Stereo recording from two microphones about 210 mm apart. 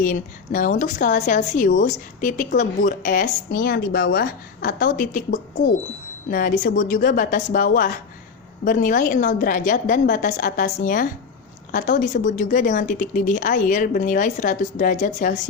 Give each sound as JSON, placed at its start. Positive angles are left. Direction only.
{"t": 0.0, "sound": "a woman's voice", "side_deg": 40}